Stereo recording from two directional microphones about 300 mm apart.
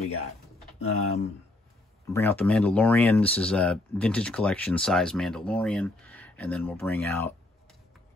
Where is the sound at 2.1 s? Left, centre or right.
Centre.